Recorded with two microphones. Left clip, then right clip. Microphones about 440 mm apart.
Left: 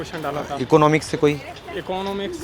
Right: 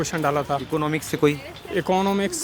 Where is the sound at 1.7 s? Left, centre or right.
Right.